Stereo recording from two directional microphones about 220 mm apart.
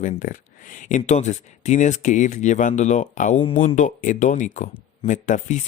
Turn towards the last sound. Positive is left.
turn(degrees=35)  # may be behind; listen again after turning